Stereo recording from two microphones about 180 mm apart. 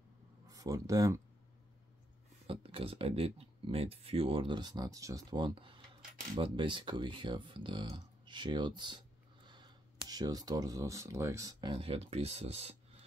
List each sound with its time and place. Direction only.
0.5 s speech: 20° right (ahead or behind)
2.4 s speech: 30° right (ahead or behind)
11.7 s speech: 35° right (ahead or behind)